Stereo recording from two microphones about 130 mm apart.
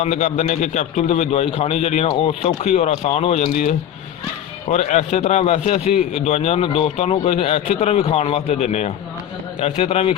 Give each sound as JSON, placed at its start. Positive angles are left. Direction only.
{"t": 0.0, "sound": "a man's voice", "side_deg": 60}
{"t": 4.7, "sound": "a man's voice", "side_deg": 60}